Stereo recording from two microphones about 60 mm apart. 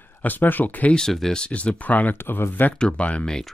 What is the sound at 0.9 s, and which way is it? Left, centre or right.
Speech, centre.